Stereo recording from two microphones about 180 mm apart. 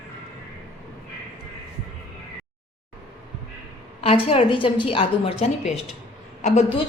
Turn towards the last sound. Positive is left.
turn(degrees=35)  # may be behind; listen again after turning